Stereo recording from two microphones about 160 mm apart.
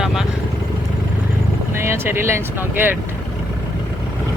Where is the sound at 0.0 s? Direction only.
5° right (ahead or behind).